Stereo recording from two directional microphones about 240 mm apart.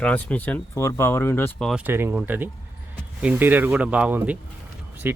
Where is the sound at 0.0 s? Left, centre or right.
Centre.